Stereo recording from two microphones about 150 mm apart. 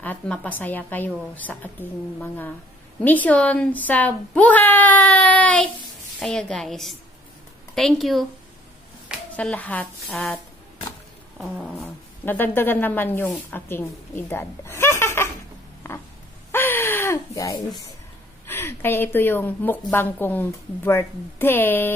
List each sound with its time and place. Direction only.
0.0 s a woman's voice: 10° left (ahead or behind)
9.4 s a woman's voice: 10° left (ahead or behind)
12.3 s a woman's voice: 15° left (ahead or behind)
15.8 s a sound: 15° left (ahead or behind)
18.5 s a woman's voice: 15° left (ahead or behind)